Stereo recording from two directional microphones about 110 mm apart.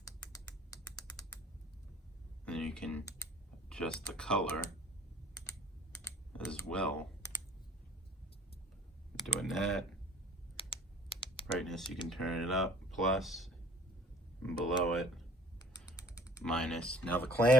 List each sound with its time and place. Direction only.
0.0 s typing: 30° left (ahead or behind)
2.4 s a sound: 5° left (ahead or behind)
3.7 s speech: 5° left (ahead or behind)
6.3 s speech: 10° left (ahead or behind)
9.2 s speech: centre (ahead or behind)
10.6 s typing: 55° left (ahead or behind)
11.5 s speech: 5° left (ahead or behind)
16.0 s typing: 30° left (ahead or behind)
16.4 s speech: 5° left (ahead or behind)